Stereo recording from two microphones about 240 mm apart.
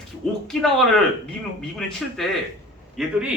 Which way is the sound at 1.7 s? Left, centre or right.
Centre.